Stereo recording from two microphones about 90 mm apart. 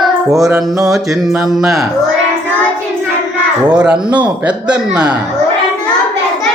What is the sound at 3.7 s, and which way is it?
Speech, 10° right (ahead or behind).